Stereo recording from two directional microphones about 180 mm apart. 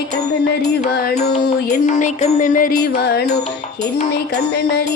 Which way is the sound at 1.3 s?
45° left (ahead or behind).